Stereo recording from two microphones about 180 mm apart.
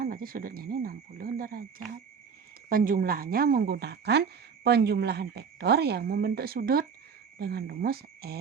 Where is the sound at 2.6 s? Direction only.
50° right (ahead or behind).